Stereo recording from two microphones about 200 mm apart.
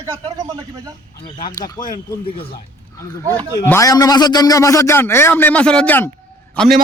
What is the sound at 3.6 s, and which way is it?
A man's voice, 15° left (ahead or behind).